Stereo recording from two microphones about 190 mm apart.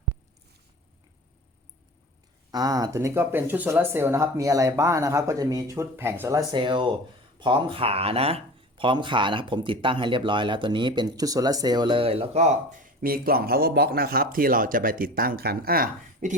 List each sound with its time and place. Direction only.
2.5 s speech: 20° right (ahead or behind)
13.0 s speech: 50° right (ahead or behind)